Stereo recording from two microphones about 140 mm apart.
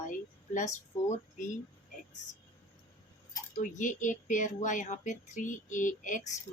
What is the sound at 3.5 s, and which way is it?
A woman's voice, 65° left (ahead or behind).